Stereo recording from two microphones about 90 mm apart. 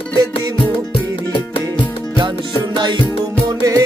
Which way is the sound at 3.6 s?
40° right (ahead or behind).